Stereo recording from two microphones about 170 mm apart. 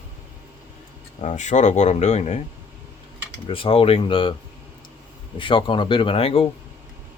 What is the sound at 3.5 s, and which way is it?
Speech, 30° left (ahead or behind).